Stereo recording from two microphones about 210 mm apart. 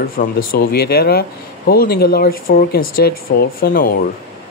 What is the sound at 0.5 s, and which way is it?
Speech, 45° left (ahead or behind).